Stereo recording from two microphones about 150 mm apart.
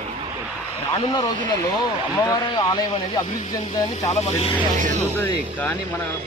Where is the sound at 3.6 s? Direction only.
45° left (ahead or behind).